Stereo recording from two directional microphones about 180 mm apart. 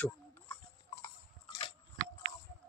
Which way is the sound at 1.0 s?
25° left (ahead or behind).